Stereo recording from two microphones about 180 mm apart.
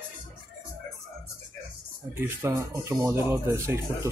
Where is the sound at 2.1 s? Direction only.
15° right (ahead or behind).